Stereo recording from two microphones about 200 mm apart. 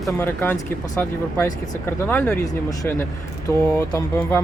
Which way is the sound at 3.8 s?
15° left (ahead or behind).